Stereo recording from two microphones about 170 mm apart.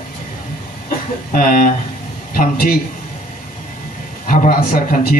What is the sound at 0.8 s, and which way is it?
A man's voice, 50° left (ahead or behind).